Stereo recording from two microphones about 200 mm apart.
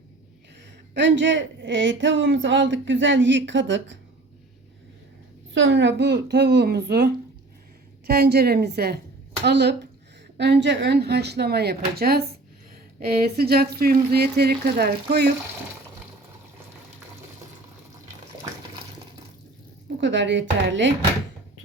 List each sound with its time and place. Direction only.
0.9 s a woman's voice: 65° right (ahead or behind)
5.5 s a woman's voice: 65° right (ahead or behind)
20.0 s a woman's voice: 60° right (ahead or behind)